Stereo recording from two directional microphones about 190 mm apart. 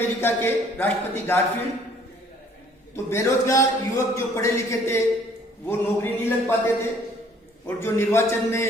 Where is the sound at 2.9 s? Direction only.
15° left (ahead or behind).